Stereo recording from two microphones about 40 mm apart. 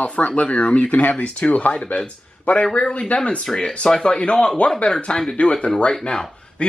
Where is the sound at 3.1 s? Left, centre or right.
Left.